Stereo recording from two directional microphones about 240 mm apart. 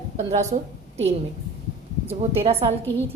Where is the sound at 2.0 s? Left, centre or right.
Right.